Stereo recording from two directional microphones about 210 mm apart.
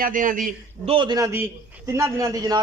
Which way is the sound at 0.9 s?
20° right (ahead or behind).